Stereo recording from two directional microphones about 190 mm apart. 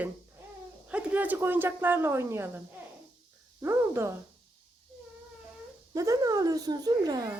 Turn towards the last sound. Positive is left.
turn(degrees=-20)  # may be behind; listen again after turning